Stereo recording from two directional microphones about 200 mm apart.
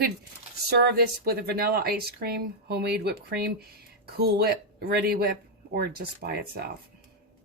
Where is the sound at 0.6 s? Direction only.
55° right (ahead or behind).